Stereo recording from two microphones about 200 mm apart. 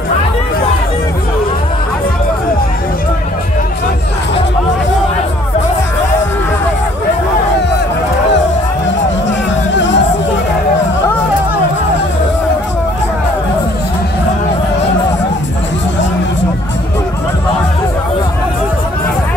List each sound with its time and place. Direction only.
9.8 s music: 65° left (ahead or behind)